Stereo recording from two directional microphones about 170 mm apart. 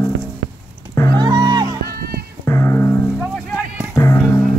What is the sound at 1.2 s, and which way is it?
Music, 25° right (ahead or behind).